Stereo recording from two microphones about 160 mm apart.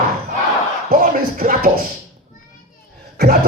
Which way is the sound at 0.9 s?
60° right (ahead or behind).